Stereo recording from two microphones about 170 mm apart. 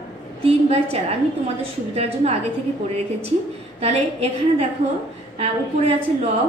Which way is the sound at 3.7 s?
35° right (ahead or behind).